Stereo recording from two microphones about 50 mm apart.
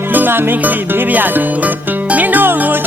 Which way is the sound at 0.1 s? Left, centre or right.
Right.